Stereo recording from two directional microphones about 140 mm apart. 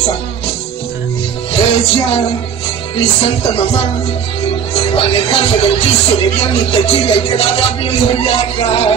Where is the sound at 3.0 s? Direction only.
45° left (ahead or behind).